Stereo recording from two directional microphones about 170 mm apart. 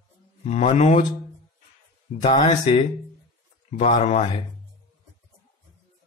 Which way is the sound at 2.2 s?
40° left (ahead or behind).